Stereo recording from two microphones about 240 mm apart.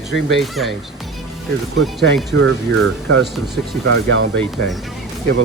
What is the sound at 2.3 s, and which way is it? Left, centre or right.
Speech, right.